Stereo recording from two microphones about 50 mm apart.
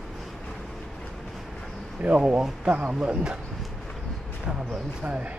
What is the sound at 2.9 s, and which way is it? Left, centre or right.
Speech, centre.